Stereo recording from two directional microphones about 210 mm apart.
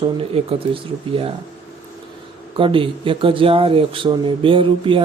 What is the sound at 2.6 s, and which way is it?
Speech, 25° right (ahead or behind).